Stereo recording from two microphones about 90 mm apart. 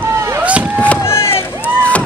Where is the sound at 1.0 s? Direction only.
30° left (ahead or behind).